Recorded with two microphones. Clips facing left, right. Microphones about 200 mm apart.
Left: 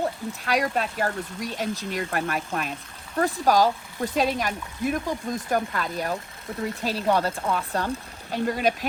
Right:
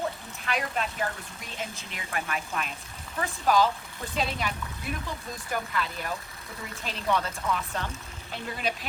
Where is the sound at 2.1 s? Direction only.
50° left (ahead or behind).